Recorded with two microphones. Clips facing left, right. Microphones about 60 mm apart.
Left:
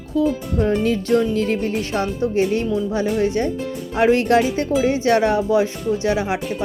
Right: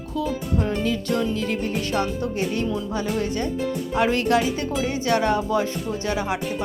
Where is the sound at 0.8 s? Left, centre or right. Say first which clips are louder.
Left 5 dB; left.